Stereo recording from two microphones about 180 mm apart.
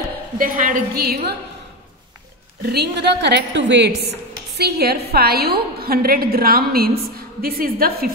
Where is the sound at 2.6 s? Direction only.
65° right (ahead or behind).